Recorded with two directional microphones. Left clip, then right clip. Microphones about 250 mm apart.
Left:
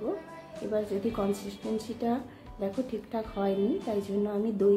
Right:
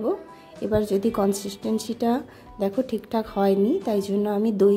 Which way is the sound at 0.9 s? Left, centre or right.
Right.